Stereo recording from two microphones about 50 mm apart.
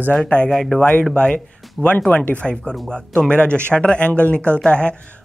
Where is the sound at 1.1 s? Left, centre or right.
Left.